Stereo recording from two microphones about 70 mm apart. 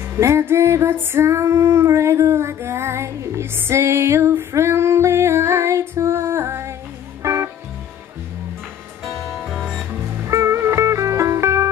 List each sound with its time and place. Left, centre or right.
0.2 s female singing: right
3.5 s music: right
9.0 s music: centre
10.2 s music: right